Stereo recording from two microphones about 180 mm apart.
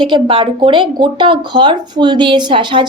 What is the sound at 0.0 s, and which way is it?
Speech, 30° right (ahead or behind).